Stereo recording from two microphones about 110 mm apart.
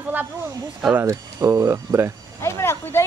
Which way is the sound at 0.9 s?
30° right (ahead or behind).